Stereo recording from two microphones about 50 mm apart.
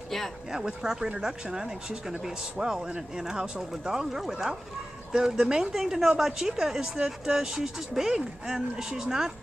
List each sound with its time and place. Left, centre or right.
0.5 s speech: centre